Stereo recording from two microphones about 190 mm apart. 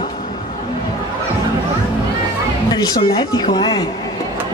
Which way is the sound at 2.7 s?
20° left (ahead or behind).